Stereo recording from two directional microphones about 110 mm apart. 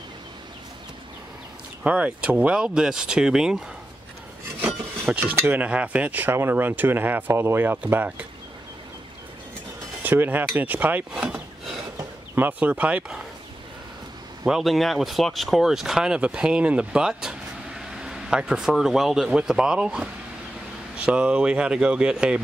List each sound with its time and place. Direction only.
1.8 s cutlery: 10° right (ahead or behind)
10.0 s speech: 15° right (ahead or behind)
10.5 s cutlery: 15° right (ahead or behind)
14.4 s speech: centre (ahead or behind)
21.0 s cutlery: 10° right (ahead or behind)